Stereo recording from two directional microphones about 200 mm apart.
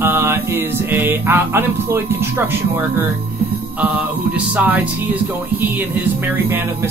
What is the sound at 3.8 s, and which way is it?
Music, 5° right (ahead or behind).